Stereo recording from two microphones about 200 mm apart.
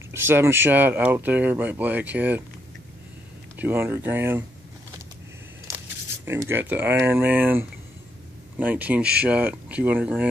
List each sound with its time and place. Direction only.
0.1 s speech: 10° right (ahead or behind)
3.5 s speech: 10° right (ahead or behind)
6.2 s speech: 10° right (ahead or behind)